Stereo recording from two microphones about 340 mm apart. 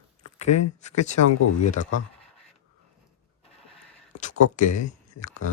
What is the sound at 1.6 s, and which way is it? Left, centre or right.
Speech, left.